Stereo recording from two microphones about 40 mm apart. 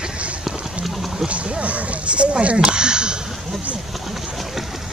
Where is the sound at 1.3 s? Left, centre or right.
Right.